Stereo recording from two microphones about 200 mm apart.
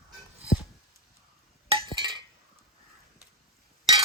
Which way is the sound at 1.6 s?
30° right (ahead or behind).